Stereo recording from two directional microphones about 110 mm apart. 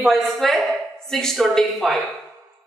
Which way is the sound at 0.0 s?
Centre (ahead or behind).